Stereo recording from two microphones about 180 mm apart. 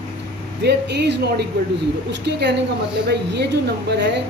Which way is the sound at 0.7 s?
70° right (ahead or behind).